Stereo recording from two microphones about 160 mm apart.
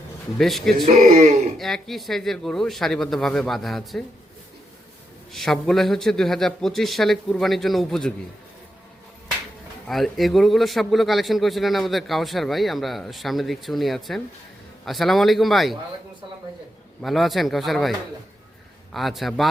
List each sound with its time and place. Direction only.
0.3 s a man's voice: centre (ahead or behind)
0.9 s speech: 50° right (ahead or behind)
1.5 s a man's voice: centre (ahead or behind)
5.3 s a man's voice: centre (ahead or behind)
9.8 s a man's voice: centre (ahead or behind)
17.0 s a man's voice: centre (ahead or behind)